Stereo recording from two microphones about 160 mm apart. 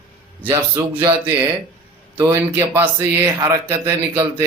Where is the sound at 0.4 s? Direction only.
15° right (ahead or behind).